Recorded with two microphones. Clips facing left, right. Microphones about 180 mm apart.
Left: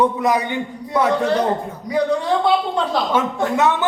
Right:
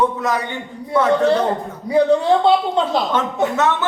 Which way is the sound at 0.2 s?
15° left (ahead or behind).